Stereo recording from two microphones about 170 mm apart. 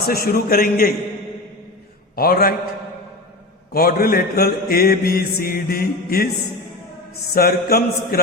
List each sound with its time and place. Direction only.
0.1 s a man's voice: 60° left (ahead or behind)
2.1 s a man's voice: 60° left (ahead or behind)
3.7 s a man's voice: 65° left (ahead or behind)
7.3 s a man's voice: 65° left (ahead or behind)